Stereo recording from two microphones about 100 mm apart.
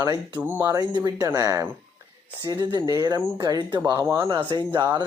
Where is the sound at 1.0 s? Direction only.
40° right (ahead or behind).